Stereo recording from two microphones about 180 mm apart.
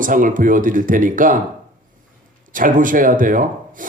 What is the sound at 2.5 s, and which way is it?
Speech, 50° right (ahead or behind).